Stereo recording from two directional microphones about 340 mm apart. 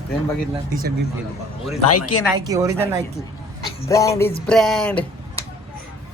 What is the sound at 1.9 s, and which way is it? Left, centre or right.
Speech, left.